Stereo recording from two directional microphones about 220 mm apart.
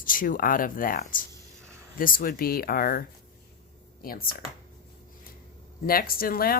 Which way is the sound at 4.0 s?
40° left (ahead or behind).